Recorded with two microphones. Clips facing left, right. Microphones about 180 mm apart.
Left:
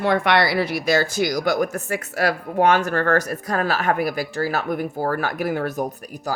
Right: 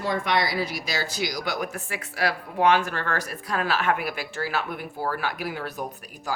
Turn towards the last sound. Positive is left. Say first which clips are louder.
# left 8 dB
turn(degrees=45)  # may be behind; listen again after turning